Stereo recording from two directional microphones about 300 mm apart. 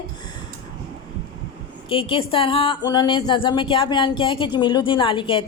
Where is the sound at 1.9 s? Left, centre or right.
Centre.